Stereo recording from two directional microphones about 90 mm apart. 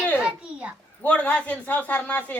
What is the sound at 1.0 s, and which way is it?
A man's voice, 15° left (ahead or behind).